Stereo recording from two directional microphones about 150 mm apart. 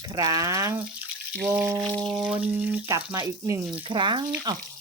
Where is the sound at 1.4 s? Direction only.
15° right (ahead or behind).